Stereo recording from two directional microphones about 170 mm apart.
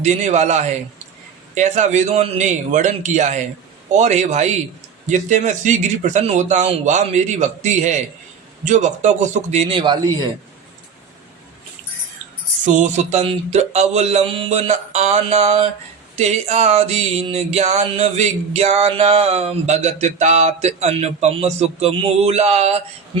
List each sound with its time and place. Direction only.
0.0 s a man's voice: 45° right (ahead or behind)
12.6 s speech: 45° right (ahead or behind)